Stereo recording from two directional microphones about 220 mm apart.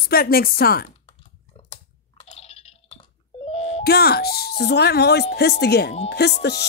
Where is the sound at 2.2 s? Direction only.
30° left (ahead or behind).